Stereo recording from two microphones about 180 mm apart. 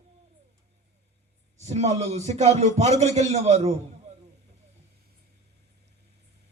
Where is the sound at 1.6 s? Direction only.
40° right (ahead or behind).